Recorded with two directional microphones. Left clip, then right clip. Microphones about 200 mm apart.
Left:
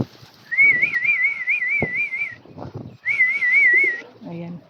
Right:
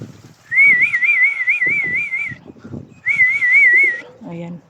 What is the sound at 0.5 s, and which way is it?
Whistling, 5° right (ahead or behind).